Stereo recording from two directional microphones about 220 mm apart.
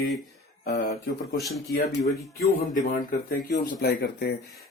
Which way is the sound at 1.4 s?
Centre (ahead or behind).